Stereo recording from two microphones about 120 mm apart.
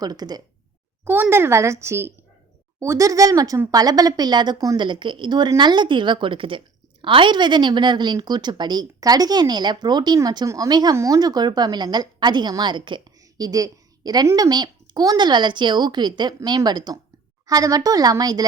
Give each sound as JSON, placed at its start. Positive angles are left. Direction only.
{"t": 0.0, "sound": "a woman's voice", "side_deg": -35}
{"t": 1.0, "sound": "a woman's voice", "side_deg": -15}